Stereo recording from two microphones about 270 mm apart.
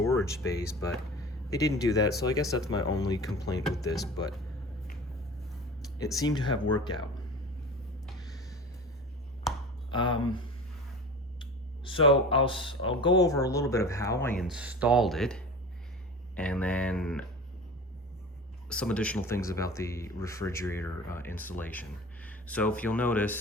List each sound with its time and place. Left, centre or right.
0.0 s speech: centre
6.0 s speech: centre
9.9 s speech: centre
11.9 s speech: centre
18.7 s speech: centre